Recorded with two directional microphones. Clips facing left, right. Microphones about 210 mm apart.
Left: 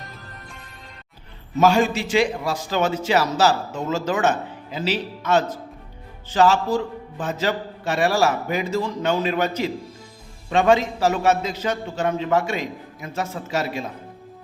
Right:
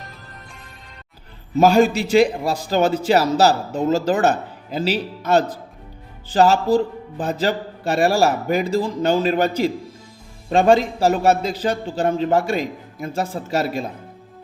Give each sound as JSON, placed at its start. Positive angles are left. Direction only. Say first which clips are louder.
{"t": 1.5, "sound": "a man's voice", "louder": "right 3 dB", "side_deg": -35}